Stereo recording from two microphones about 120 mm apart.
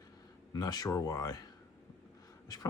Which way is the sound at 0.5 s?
35° left (ahead or behind).